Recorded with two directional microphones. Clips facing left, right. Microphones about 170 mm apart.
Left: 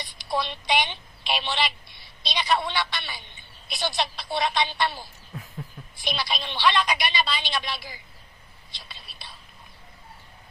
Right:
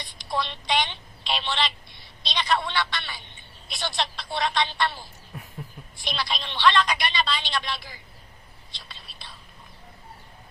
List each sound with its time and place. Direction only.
0.2 s a woman's voice: 10° left (ahead or behind)
8.7 s whispering: 10° left (ahead or behind)